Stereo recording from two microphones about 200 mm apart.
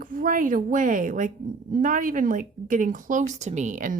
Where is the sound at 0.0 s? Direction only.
40° right (ahead or behind).